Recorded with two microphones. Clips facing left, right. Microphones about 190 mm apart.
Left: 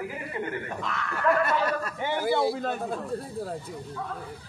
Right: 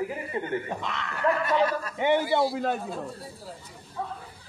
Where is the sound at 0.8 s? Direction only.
20° right (ahead or behind).